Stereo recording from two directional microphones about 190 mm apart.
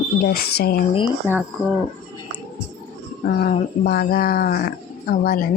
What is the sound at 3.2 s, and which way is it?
Speech, 50° left (ahead or behind).